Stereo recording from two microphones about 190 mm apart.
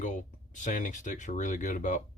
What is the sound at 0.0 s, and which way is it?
Speech, 40° left (ahead or behind).